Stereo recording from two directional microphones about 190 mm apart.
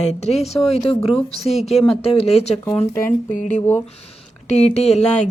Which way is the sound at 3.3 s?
40° left (ahead or behind).